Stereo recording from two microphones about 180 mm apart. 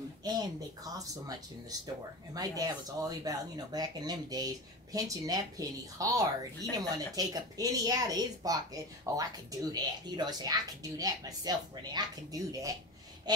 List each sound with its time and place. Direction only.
0.2 s speech: 20° right (ahead or behind)